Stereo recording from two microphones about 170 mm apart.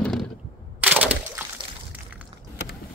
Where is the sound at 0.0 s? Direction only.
Centre (ahead or behind).